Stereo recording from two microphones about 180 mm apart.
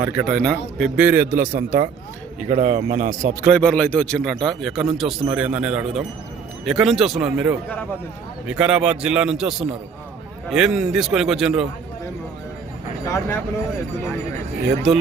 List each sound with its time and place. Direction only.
0.0 s a man's voice: 5° right (ahead or behind)
1.4 s speech: 50° right (ahead or behind)
3.5 s a man's voice: 5° left (ahead or behind)
13.1 s speech: 15° left (ahead or behind)